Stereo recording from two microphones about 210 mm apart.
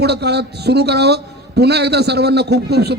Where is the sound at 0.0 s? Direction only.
50° right (ahead or behind).